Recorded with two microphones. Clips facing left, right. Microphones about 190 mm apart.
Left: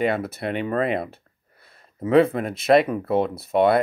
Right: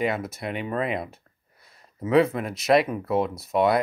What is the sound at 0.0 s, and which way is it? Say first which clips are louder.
Speech: left 3 dB; 60° left (ahead or behind).